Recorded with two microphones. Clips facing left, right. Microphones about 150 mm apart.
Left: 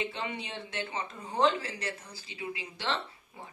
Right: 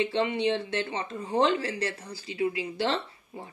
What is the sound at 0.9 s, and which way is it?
Speech, 75° right (ahead or behind).